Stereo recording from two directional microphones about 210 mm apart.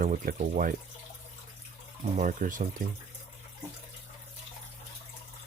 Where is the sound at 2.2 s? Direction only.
40° right (ahead or behind).